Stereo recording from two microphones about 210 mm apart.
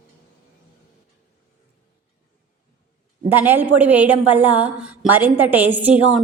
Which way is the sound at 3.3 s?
10° right (ahead or behind).